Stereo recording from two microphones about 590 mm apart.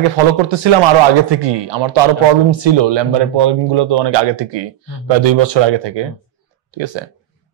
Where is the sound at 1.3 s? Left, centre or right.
Right.